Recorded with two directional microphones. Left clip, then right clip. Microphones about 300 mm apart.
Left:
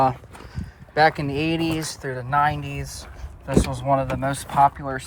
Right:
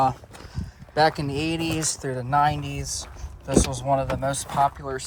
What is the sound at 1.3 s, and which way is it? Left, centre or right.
Speech, centre.